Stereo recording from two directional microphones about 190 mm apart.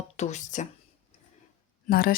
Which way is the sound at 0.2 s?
40° left (ahead or behind).